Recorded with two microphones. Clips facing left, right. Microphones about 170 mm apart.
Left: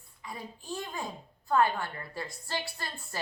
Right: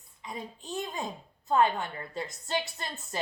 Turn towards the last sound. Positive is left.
turn(degrees=-20)  # may be behind; listen again after turning